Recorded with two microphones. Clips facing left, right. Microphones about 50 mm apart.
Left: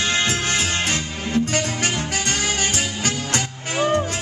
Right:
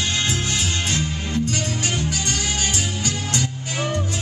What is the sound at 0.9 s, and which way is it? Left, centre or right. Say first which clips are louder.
Music: left 1 dB; left.